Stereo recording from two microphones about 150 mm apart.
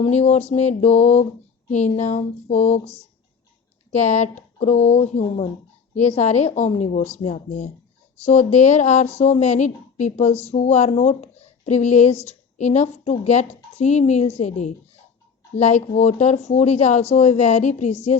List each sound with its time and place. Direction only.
0.0 s speech: 45° left (ahead or behind)
3.9 s speech: 50° left (ahead or behind)